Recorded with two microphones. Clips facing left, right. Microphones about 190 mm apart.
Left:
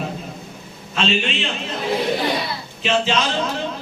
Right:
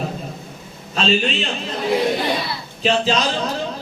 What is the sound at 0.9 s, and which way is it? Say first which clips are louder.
Speech: right 2 dB; 35° right (ahead or behind).